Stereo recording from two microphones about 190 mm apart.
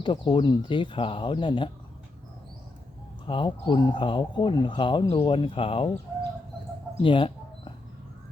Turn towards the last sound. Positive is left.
turn(degrees=25)  # may be behind; listen again after turning